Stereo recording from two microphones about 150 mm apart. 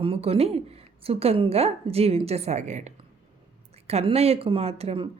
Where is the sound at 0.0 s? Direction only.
40° right (ahead or behind).